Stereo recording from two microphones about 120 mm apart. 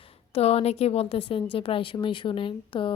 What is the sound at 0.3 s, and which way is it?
A woman's voice, 60° left (ahead or behind).